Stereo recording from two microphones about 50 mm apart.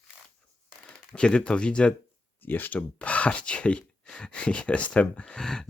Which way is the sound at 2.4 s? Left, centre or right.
Left.